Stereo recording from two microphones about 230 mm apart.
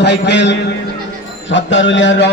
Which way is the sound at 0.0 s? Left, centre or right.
Left.